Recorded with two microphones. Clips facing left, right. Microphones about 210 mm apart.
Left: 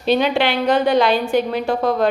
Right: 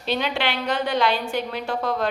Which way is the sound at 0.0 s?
15° left (ahead or behind).